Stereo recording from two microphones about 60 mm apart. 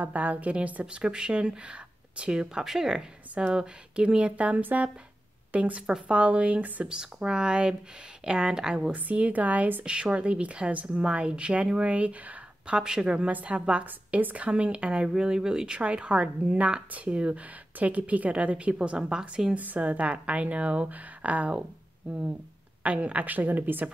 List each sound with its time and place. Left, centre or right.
0.0 s a woman's voice: right
8.9 s speech: right
9.8 s a woman's voice: centre
19.5 s speech: right
22.8 s speech: right